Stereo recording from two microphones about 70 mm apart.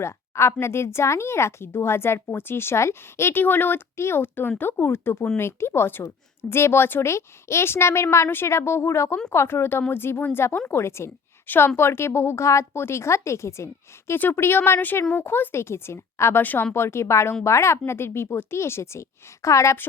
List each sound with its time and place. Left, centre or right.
0.0 s speech: left
11.4 s speech: left
11.8 s speech: left
14.1 s speech: left
16.4 s speech: left
16.7 s speech: left